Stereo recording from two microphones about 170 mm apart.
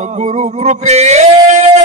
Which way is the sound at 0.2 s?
45° right (ahead or behind).